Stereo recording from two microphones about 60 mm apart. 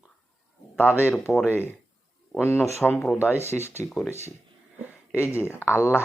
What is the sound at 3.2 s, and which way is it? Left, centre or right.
Speech, left.